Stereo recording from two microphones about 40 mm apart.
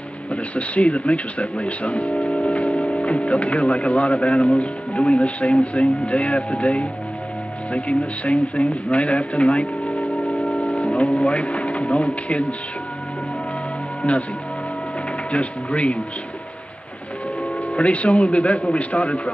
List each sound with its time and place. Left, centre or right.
0.3 s speech: left
15.3 s speech: left
17.7 s speech: left